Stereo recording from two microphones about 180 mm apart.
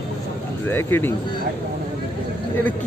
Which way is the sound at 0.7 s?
10° left (ahead or behind).